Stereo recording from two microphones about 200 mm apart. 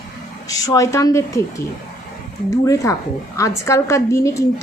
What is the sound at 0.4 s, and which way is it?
Speech, 15° left (ahead or behind).